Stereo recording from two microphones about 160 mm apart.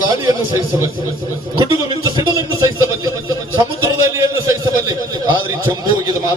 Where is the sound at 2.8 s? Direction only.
20° right (ahead or behind).